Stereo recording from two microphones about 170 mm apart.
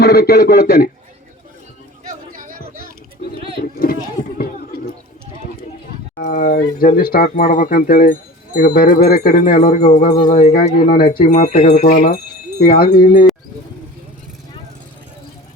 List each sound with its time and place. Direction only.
0.0 s speech: 65° left (ahead or behind)
2.0 s a sound: 55° right (ahead or behind)
3.6 s a sound: 60° left (ahead or behind)
6.1 s speech: 50° left (ahead or behind)
10.2 s speech: 40° left (ahead or behind)
10.7 s speech: 55° left (ahead or behind)
11.2 s speech: 45° left (ahead or behind)
12.5 s speech: 60° left (ahead or behind)